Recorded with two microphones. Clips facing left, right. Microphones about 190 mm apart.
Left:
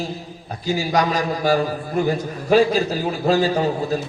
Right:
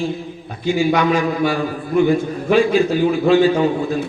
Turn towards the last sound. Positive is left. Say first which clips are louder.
# right 3 dB
turn(degrees=40)  # may be behind; listen again after turning